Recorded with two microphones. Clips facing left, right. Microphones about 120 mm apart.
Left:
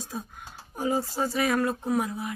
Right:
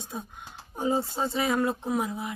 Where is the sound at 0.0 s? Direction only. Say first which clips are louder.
Left 1 dB; 20° right (ahead or behind).